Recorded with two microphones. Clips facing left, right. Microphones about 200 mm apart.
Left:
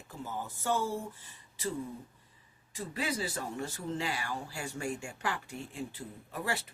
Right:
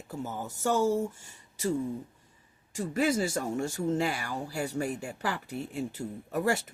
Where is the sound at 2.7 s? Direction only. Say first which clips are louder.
Right 8 dB; 45° right (ahead or behind).